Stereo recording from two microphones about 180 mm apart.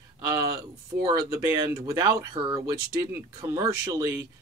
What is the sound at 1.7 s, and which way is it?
Speech, 20° right (ahead or behind).